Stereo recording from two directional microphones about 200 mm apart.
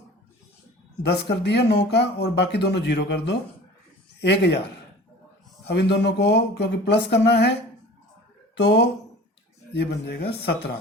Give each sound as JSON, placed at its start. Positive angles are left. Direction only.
{"t": 1.0, "sound": "speech", "side_deg": 55}
{"t": 5.6, "sound": "speech", "side_deg": 60}
{"t": 8.5, "sound": "speech", "side_deg": 60}